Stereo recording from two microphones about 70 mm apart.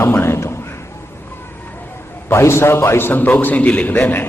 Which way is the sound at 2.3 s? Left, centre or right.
Left.